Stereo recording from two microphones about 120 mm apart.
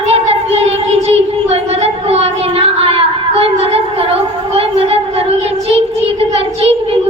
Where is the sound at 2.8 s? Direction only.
55° right (ahead or behind).